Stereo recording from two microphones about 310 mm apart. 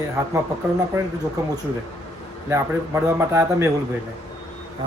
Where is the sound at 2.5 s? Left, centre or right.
Centre.